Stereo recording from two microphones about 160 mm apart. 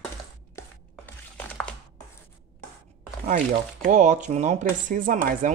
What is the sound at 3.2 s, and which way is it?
Speech, 50° right (ahead or behind).